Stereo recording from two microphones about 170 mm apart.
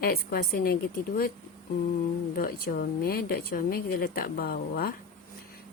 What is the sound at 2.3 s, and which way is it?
Speech, 60° left (ahead or behind).